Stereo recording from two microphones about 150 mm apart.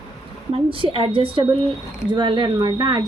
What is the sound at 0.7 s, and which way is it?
A woman's voice, 35° right (ahead or behind).